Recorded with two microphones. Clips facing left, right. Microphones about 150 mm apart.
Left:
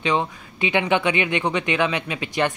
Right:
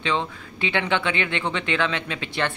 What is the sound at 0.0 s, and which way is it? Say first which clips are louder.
Speech: left 3 dB; 15° left (ahead or behind).